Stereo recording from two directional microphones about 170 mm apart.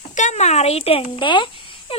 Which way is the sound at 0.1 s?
45° left (ahead or behind).